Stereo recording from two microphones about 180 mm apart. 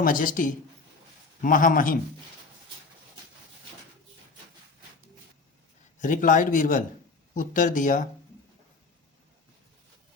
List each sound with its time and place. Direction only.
0.0 s speech: 50° left (ahead or behind)
6.0 s speech: 45° left (ahead or behind)